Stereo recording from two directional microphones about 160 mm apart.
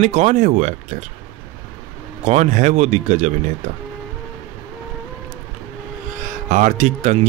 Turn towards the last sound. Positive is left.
turn(degrees=-45)  # may be behind; listen again after turning